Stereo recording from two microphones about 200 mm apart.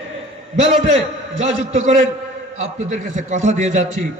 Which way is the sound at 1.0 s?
35° right (ahead or behind).